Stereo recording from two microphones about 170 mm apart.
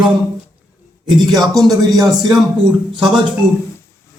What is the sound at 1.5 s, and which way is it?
Speech, centre (ahead or behind).